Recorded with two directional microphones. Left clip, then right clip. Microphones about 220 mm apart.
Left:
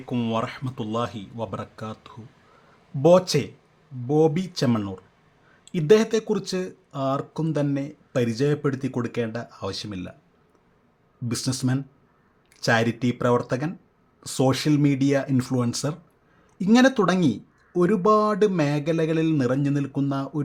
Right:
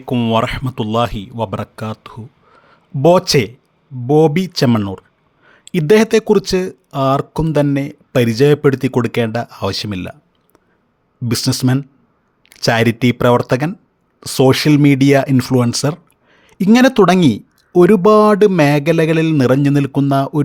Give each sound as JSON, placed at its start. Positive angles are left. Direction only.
{"t": 0.0, "sound": "speech", "side_deg": -35}
{"t": 11.3, "sound": "speech", "side_deg": -40}